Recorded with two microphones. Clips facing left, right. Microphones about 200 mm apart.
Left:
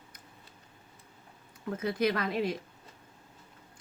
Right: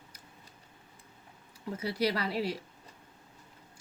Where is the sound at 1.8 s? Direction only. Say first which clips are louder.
Left 2 dB; 35° right (ahead or behind).